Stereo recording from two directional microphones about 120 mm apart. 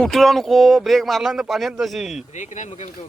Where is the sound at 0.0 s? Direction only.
Centre (ahead or behind).